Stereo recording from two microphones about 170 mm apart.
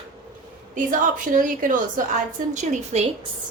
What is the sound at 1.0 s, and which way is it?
Speech, 50° right (ahead or behind).